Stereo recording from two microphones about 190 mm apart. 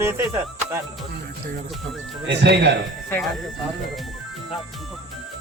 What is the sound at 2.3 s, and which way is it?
Speech, 60° right (ahead or behind).